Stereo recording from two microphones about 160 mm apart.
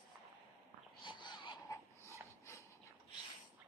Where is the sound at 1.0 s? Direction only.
30° left (ahead or behind).